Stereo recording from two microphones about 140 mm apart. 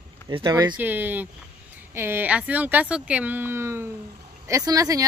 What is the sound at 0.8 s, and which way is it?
Speech, 15° right (ahead or behind).